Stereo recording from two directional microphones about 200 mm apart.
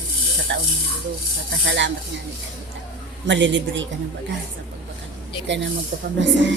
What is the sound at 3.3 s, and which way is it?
Speech, 65° right (ahead or behind).